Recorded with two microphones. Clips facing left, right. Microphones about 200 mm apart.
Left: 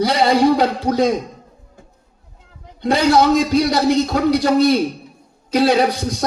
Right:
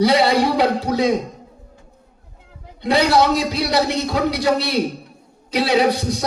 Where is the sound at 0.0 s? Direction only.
45° left (ahead or behind).